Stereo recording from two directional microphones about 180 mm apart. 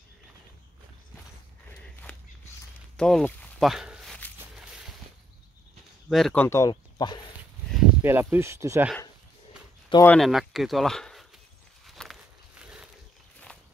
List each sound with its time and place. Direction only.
1.8 s a sound: 5° left (ahead or behind)
3.0 s walk: 5° left (ahead or behind)
6.0 s speech: centre (ahead or behind)
6.4 s speech: 15° left (ahead or behind)
8.0 s speech: 10° right (ahead or behind)
10.0 s speech: centre (ahead or behind)
11.8 s walk: centre (ahead or behind)
12.6 s a sound: 5° right (ahead or behind)